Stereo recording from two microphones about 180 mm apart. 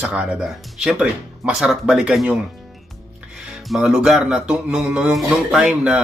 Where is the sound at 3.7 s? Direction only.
5° right (ahead or behind).